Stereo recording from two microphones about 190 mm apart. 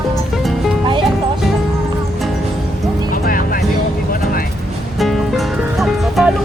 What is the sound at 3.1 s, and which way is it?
Music, 50° left (ahead or behind).